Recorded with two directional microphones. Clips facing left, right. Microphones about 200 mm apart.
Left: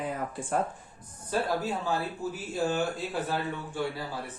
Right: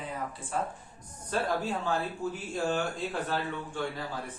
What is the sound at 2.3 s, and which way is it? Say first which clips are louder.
A man's voice: left 3 dB; 5° left (ahead or behind).